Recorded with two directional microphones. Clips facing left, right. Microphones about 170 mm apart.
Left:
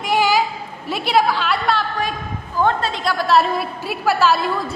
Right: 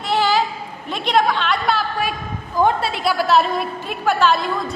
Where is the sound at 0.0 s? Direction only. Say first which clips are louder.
Left 1 dB; 10° left (ahead or behind).